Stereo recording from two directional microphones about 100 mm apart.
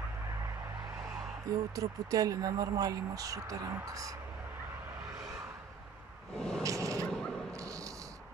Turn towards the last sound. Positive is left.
turn(degrees=-35)  # may be behind; listen again after turning